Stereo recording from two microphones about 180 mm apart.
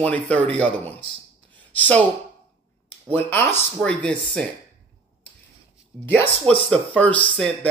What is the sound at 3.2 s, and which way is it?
Speech, 10° left (ahead or behind).